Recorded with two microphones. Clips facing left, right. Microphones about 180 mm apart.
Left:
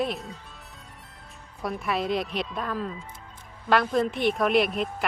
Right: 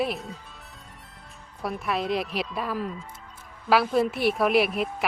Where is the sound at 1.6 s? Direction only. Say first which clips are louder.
Even; centre (ahead or behind).